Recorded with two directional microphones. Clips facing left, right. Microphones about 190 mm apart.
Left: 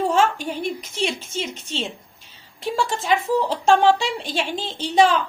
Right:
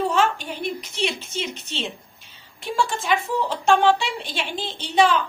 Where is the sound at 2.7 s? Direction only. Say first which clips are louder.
Right 1 dB; 40° left (ahead or behind).